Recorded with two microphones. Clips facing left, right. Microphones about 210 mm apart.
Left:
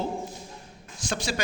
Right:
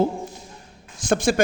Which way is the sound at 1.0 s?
50° right (ahead or behind).